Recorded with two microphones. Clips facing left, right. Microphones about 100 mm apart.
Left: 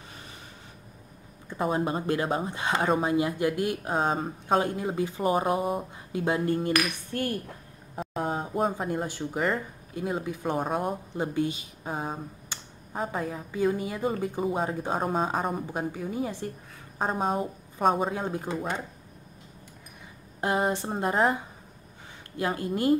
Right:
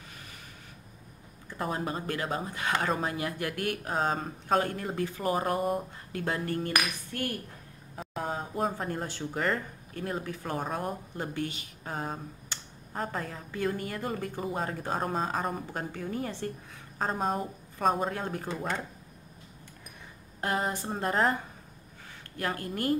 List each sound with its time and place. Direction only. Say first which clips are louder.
1.5 s speech: left 5 dB; 20° left (ahead or behind); by 5.9 s 5° left (ahead or behind)
6.1 s speech: left 5 dB; 15° left (ahead or behind)
8.0 s a sound: left 5 dB; centre (ahead or behind)
8.4 s speech: left 3 dB; 5° left (ahead or behind)
20.3 s speech: left 4 dB; 20° left (ahead or behind)
20.9 s speech: left 1 dB; 10° left (ahead or behind)
22.4 s speech: left 5 dB; 20° left (ahead or behind)